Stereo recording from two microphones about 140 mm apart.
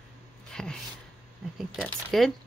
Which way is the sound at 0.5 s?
5° left (ahead or behind).